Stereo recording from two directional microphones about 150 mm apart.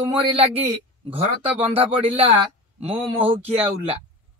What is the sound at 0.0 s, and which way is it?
Speech, 40° right (ahead or behind).